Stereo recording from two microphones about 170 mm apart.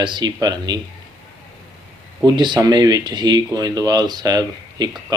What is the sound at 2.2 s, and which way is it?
Speech, 25° right (ahead or behind).